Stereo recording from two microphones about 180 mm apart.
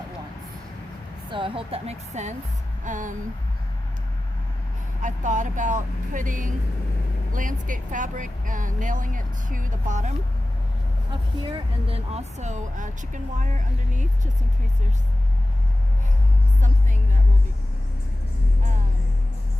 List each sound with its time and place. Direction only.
1.3 s speech: 30° right (ahead or behind); by 3.2 s 45° right (ahead or behind)
5.0 s speech: 45° right (ahead or behind)
11.9 s speech: 40° right (ahead or behind)
16.6 s vehicle: 45° right (ahead or behind)